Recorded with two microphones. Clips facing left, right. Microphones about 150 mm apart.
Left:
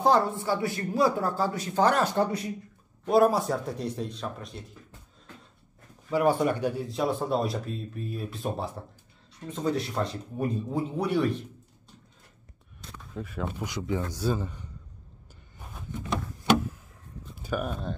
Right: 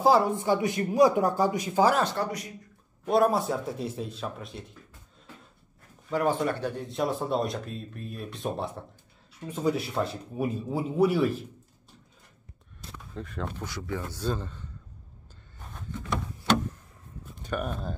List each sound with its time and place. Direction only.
0.0 s a man's voice: 5° right (ahead or behind)
0.4 s a man's voice: 20° right (ahead or behind)
3.1 s speech: centre (ahead or behind)
6.1 s speech: 10° left (ahead or behind)
9.5 s speech: 10° right (ahead or behind)
12.8 s speech: centre (ahead or behind)
13.7 s a man's voice: 20° left (ahead or behind)
15.6 s a sound: 15° left (ahead or behind)
17.4 s speech: 5° left (ahead or behind)